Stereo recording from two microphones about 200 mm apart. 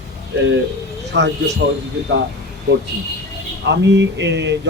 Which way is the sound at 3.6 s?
60° right (ahead or behind).